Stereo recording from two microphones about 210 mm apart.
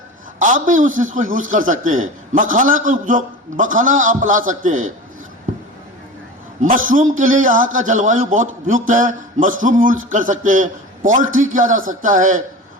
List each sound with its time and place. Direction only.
0.3 s a man's voice: 40° right (ahead or behind)
6.6 s a man's voice: 40° right (ahead or behind)